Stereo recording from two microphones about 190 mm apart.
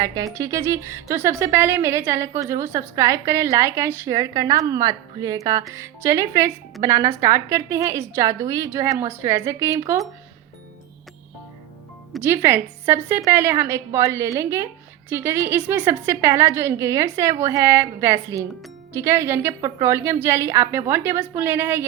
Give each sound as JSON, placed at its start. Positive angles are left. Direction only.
{"t": 0.3, "sound": "a woman's voice", "side_deg": -15}
{"t": 12.2, "sound": "a woman's voice", "side_deg": -10}